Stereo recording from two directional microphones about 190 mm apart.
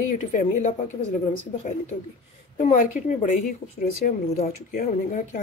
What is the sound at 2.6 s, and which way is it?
Speech, 40° left (ahead or behind).